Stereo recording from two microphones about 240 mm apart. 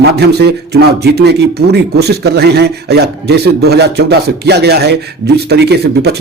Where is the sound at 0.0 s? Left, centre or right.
Right.